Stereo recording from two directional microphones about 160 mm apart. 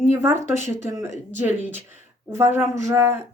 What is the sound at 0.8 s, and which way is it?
A woman's voice, 15° right (ahead or behind).